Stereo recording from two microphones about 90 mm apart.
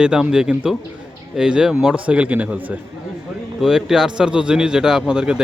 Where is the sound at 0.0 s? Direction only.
5° right (ahead or behind).